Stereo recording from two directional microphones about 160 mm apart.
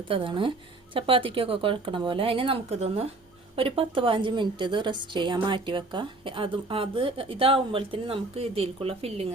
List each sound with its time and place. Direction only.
0.1 s a woman's voice: 35° right (ahead or behind)